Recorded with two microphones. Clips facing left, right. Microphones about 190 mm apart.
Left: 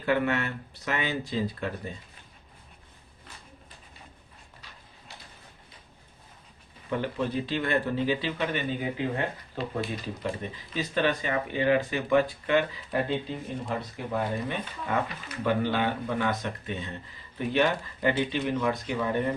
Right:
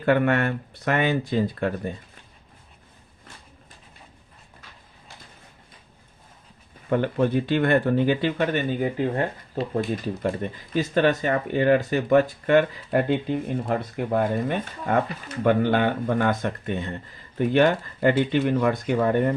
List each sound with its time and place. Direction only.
0.0 s speech: 55° right (ahead or behind)
6.9 s speech: 55° right (ahead or behind)